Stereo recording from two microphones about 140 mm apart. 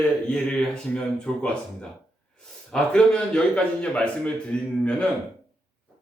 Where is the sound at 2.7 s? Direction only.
5° left (ahead or behind).